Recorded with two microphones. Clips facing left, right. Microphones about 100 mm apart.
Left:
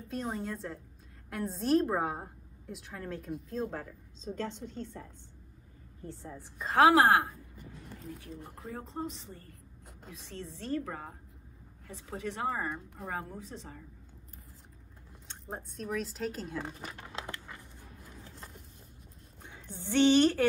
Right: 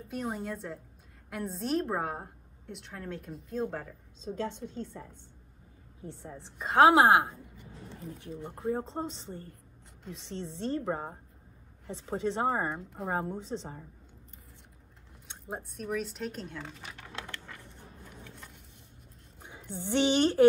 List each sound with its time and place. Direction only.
0.1 s a woman's voice: 5° right (ahead or behind)
6.0 s speech: 20° right (ahead or behind)
15.2 s a woman's voice: 5° right (ahead or behind)
16.9 s a sound: 25° left (ahead or behind)
18.2 s vehicle: 35° left (ahead or behind)
19.4 s speech: 15° right (ahead or behind)